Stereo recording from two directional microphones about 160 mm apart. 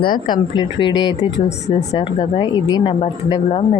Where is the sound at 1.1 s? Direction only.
45° left (ahead or behind).